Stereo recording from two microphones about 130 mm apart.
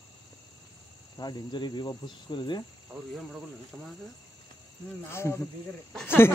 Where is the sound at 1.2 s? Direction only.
35° left (ahead or behind).